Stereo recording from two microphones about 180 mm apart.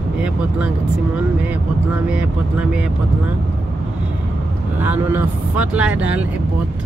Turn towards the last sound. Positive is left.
turn(degrees=-5)  # may be behind; listen again after turning